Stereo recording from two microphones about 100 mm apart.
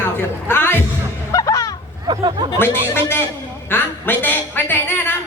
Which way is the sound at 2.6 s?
20° left (ahead or behind).